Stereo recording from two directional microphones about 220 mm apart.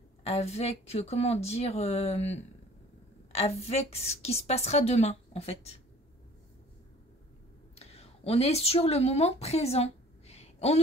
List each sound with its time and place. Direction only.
0.2 s a woman's voice: 30° left (ahead or behind)
7.7 s speech: 25° left (ahead or behind)